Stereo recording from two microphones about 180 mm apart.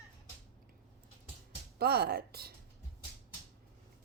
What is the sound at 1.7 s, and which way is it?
Speech, 60° right (ahead or behind).